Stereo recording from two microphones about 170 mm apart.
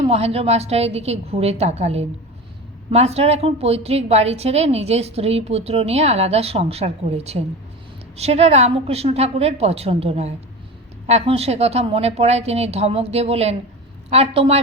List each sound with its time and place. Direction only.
0.0 s a woman's voice: 35° right (ahead or behind)